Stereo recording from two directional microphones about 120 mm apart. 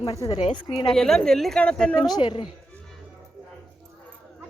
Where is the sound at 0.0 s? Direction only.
35° left (ahead or behind).